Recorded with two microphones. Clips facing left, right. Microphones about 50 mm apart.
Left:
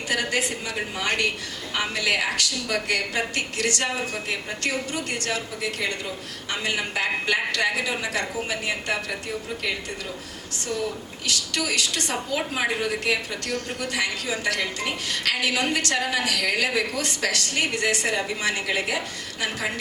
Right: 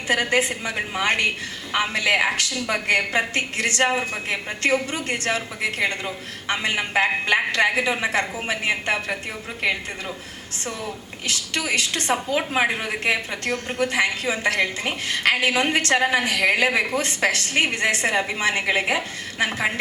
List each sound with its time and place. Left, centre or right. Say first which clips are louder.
0.1 s a woman's voice: right 5 dB; right
11.3 s a woman's voice: right 2 dB; right